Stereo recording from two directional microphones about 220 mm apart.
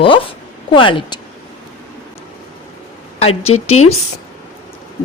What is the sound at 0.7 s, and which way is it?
Speech, 20° left (ahead or behind).